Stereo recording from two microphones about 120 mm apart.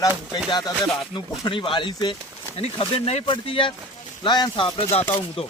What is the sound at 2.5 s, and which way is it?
Speech, 55° left (ahead or behind).